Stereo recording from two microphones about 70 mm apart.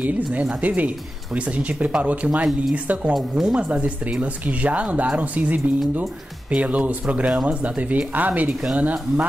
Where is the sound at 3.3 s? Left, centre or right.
Centre.